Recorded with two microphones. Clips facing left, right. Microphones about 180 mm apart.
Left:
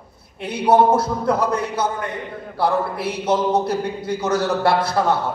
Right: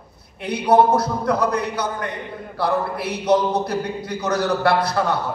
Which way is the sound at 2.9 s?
25° left (ahead or behind).